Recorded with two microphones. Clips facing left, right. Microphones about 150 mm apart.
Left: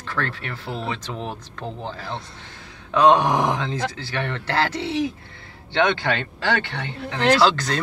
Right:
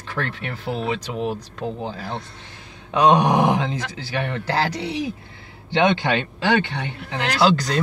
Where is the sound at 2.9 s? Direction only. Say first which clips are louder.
Even; 15° right (ahead or behind).